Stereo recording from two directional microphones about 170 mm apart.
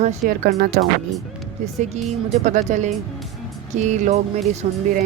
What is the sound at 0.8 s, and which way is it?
Speech, 65° right (ahead or behind).